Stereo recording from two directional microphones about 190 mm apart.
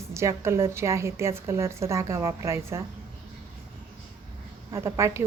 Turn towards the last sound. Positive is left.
turn(degrees=-15)  # may be behind; listen again after turning